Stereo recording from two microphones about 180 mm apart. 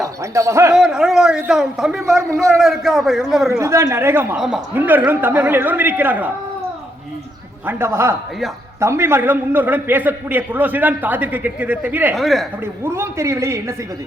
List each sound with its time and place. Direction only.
0.2 s a man's voice: 15° right (ahead or behind)
0.7 s a man's voice: 5° right (ahead or behind)
3.6 s a man's voice: 15° right (ahead or behind)
7.7 s a man's voice: 15° right (ahead or behind)
12.8 s a man's voice: 15° right (ahead or behind)